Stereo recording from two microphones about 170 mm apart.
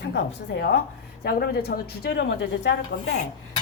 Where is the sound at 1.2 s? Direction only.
60° left (ahead or behind); by 3.1 s 90° left.